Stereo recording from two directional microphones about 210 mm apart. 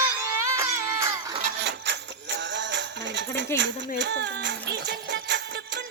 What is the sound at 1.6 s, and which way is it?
Music, 55° right (ahead or behind).